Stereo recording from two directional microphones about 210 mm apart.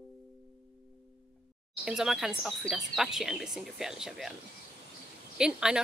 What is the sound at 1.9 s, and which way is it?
Speech, centre (ahead or behind).